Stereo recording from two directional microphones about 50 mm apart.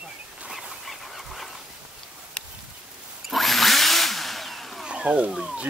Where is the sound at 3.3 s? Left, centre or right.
Centre.